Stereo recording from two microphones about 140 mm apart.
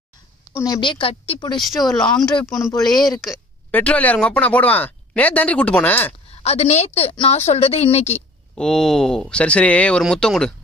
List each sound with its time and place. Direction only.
0.7 s a woman's voice: 35° left (ahead or behind)
1.5 s speech: centre (ahead or behind)
3.7 s speech: 10° left (ahead or behind)
6.3 s a woman's voice: 50° left (ahead or behind)
8.5 s speech: 5° left (ahead or behind)